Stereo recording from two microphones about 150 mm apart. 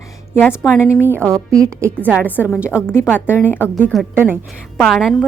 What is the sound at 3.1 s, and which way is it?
Speech, 15° left (ahead or behind).